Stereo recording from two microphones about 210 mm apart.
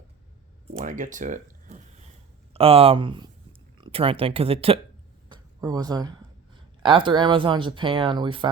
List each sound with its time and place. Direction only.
0.7 s speech: 35° right (ahead or behind)